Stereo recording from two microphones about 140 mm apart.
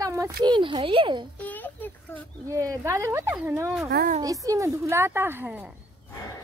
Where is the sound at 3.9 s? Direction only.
80° right.